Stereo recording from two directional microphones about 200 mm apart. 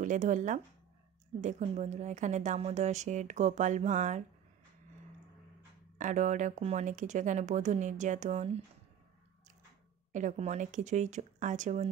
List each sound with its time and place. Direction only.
0.0 s a woman's voice: 40° right (ahead or behind)
5.9 s a woman's voice: 40° right (ahead or behind)
10.1 s a woman's voice: 35° right (ahead or behind)